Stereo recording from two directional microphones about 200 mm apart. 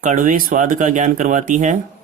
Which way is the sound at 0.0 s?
40° right (ahead or behind).